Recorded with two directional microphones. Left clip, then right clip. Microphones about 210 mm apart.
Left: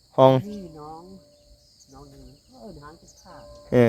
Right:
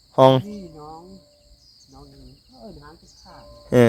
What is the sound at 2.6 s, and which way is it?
Cricket, 15° left (ahead or behind).